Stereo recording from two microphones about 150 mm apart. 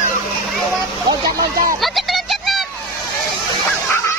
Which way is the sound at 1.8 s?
Centre (ahead or behind).